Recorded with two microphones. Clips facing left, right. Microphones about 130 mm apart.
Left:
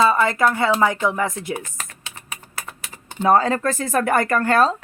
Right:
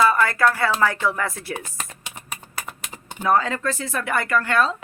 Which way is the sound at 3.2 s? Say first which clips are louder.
Left 4 dB; 35° left (ahead or behind).